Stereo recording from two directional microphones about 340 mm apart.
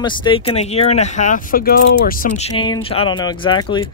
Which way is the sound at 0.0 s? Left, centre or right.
Centre.